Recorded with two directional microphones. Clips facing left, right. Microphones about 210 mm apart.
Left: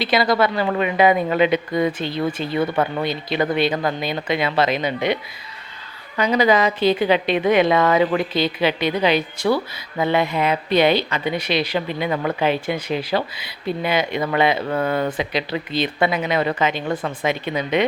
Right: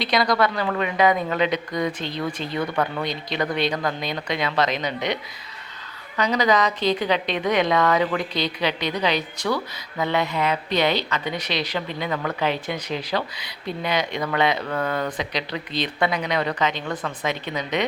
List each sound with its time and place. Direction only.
0.0 s a woman's voice: 5° left (ahead or behind)
2.6 s speech: 25° left (ahead or behind)
3.0 s a woman's voice: 5° left (ahead or behind); by 12.4 s 20° left (ahead or behind)
12.4 s a woman's voice: 10° left (ahead or behind)
14.6 s speech: 25° left (ahead or behind)
15.2 s a woman's voice: 5° left (ahead or behind)
16.8 s speech: 25° left (ahead or behind)
17.2 s a woman's voice: 10° left (ahead or behind)